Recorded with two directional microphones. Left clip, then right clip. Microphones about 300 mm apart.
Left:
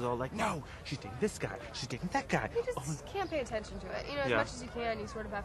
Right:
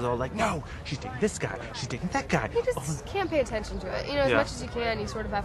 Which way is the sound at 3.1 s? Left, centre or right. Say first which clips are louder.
Right 8 dB; centre.